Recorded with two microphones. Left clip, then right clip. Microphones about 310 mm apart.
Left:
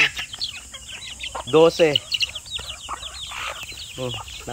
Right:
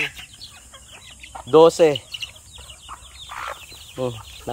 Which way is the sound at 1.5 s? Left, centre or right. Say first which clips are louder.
Right 2 dB; centre.